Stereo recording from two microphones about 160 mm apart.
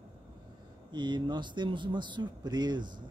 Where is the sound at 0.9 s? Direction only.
30° right (ahead or behind).